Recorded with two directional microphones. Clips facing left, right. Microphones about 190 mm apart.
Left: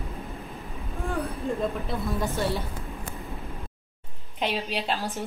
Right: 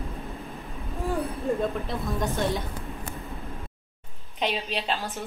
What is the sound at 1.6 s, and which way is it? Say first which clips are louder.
Speech: even; centre (ahead or behind).